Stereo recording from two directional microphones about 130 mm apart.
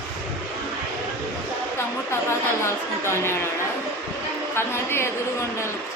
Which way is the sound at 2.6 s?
20° left (ahead or behind).